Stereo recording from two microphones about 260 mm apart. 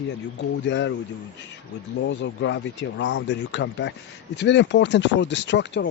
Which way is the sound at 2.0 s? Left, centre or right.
Left.